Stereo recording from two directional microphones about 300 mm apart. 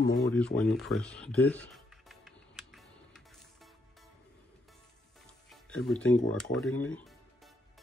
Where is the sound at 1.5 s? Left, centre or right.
Centre.